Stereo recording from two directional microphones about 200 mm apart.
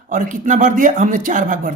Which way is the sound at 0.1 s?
40° right (ahead or behind).